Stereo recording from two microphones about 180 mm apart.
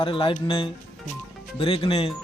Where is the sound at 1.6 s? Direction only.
30° left (ahead or behind).